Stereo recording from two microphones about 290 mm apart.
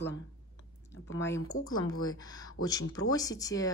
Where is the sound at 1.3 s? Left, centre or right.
Left.